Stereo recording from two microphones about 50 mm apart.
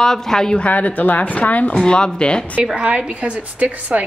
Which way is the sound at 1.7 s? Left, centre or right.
Centre.